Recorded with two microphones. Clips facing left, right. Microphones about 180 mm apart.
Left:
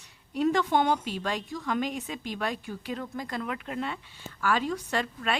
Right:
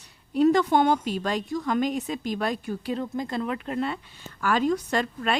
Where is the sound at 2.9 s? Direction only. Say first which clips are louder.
Right 6 dB; 25° right (ahead or behind).